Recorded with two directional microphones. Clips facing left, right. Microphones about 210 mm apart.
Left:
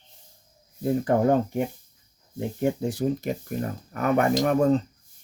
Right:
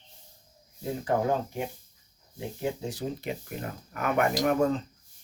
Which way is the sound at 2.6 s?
50° left (ahead or behind).